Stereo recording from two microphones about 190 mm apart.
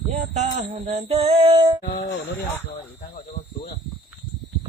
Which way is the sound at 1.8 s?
45° left (ahead or behind).